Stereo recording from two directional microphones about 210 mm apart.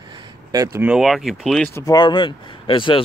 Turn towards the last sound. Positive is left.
turn(degrees=25)  # may be behind; listen again after turning